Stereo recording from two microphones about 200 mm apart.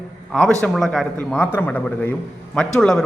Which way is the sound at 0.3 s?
Centre (ahead or behind).